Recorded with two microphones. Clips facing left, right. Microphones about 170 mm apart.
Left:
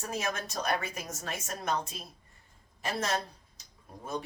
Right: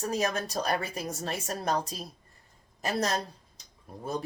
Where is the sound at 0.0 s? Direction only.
35° right (ahead or behind).